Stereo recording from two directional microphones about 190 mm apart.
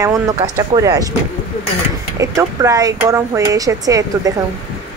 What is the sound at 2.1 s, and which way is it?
Speech, 15° right (ahead or behind).